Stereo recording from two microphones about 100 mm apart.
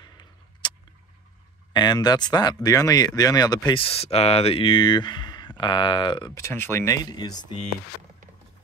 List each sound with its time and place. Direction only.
0.0 s a sound: 50° left (ahead or behind)
1.7 s speech: 45° left (ahead or behind)
3.7 s speech: 75° left (ahead or behind); by 6.3 s 55° left (ahead or behind)
6.5 s speech: 20° left (ahead or behind)
7.0 s speech: 40° left (ahead or behind)